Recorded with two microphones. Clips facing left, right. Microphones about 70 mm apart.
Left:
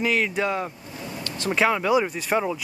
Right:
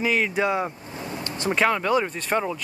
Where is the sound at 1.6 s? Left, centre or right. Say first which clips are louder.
Left 1 dB; centre.